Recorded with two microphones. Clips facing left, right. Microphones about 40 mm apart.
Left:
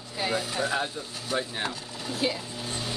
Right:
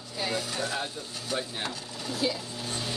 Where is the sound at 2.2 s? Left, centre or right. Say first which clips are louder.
Left 1 dB; left.